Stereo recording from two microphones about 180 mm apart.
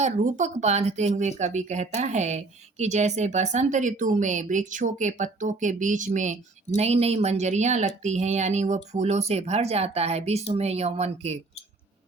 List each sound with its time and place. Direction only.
0.0 s speech: 40° right (ahead or behind)